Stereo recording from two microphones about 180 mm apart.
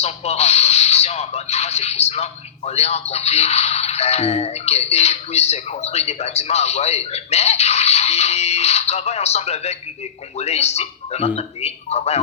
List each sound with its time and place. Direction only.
0.0 s speech: 35° left (ahead or behind)